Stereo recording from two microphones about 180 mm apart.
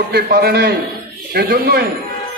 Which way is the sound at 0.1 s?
60° right (ahead or behind).